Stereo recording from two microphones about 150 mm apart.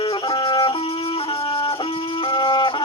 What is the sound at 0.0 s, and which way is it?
Music, 35° left (ahead or behind).